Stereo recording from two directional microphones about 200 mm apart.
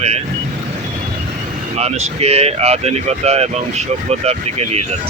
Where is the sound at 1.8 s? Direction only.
35° right (ahead or behind).